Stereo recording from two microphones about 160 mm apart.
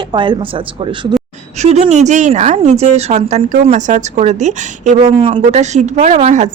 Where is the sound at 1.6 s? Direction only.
45° right (ahead or behind).